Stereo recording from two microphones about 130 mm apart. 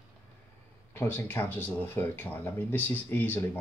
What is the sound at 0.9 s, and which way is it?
Speech, 15° left (ahead or behind).